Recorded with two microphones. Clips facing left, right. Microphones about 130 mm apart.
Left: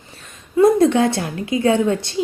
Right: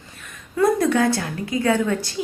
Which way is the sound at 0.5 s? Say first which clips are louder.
Left 5 dB; 25° left (ahead or behind).